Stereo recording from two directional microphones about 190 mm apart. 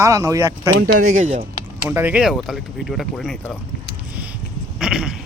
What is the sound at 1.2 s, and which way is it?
Speech, 40° right (ahead or behind).